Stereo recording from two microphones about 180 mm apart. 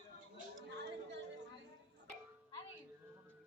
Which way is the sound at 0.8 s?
75° right (ahead or behind).